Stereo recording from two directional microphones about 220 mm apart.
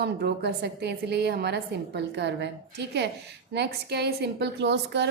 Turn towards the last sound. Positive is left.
turn(degrees=-50)  # may be behind; listen again after turning